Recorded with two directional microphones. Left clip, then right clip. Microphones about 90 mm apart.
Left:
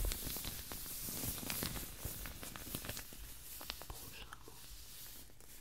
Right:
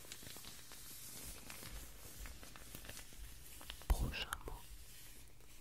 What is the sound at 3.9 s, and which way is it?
Whispering, 35° right (ahead or behind).